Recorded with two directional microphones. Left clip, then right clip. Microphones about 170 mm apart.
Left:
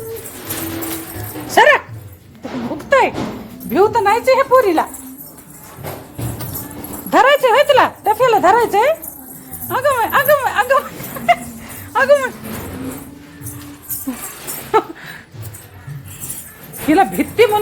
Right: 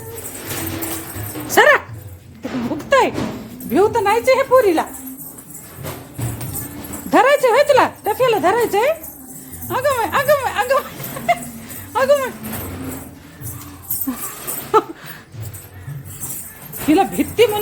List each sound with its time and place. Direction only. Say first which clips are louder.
1.5 s speech: left 2 dB; 15° right (ahead or behind)
2.7 s music: left 2 dB; 15° right (ahead or behind)
3.7 s a woman's voice: left 2 dB; centre (ahead or behind)
7.1 s speech: left 2 dB; 10° right (ahead or behind)
11.9 s speech: left 3 dB; 20° right (ahead or behind)
16.8 s speech: left 2 dB; centre (ahead or behind)